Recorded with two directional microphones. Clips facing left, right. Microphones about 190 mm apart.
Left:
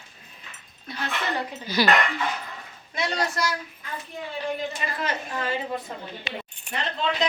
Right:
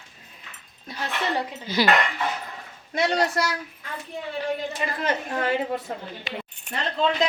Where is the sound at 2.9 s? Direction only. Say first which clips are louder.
Right 5 dB; 70° right (ahead or behind).